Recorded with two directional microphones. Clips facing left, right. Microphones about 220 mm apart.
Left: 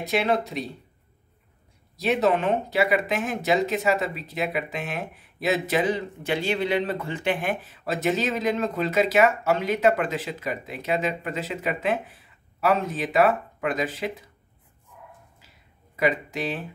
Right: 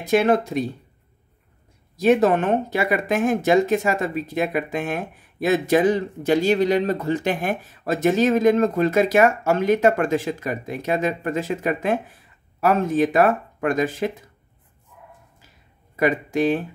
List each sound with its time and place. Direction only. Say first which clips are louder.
0.0 s speech: right 6 dB; 50° right (ahead or behind)
2.0 s speech: right 5 dB; 50° right (ahead or behind)
16.0 s speech: right 5 dB; 50° right (ahead or behind)